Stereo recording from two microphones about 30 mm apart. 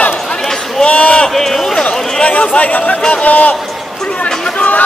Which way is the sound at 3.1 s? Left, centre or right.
Left.